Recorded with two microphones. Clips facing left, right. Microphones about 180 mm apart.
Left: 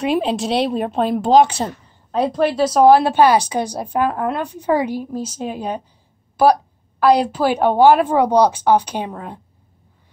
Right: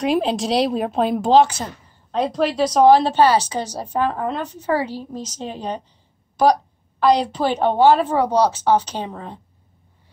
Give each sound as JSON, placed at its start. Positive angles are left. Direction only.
{"t": 0.0, "sound": "speech", "side_deg": 0}
{"t": 1.6, "sound": "a woman's voice", "side_deg": 35}
{"t": 2.1, "sound": "a woman's voice", "side_deg": 10}
{"t": 7.0, "sound": "a woman's voice", "side_deg": 5}